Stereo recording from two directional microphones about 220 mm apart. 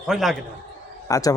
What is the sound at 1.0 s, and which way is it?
Speech, 15° left (ahead or behind).